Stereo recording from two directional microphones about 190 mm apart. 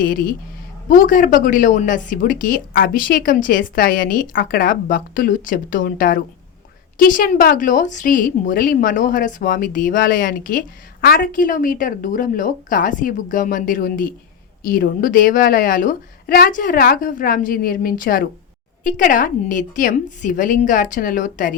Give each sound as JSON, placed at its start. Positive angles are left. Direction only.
{"t": 0.0, "sound": "speech", "side_deg": 50}